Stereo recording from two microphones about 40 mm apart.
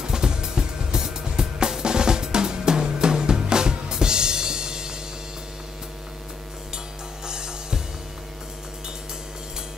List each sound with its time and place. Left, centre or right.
0.0 s music: centre
7.2 s music: centre